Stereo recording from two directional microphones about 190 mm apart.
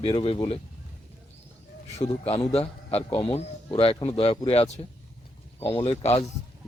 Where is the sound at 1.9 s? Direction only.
30° left (ahead or behind).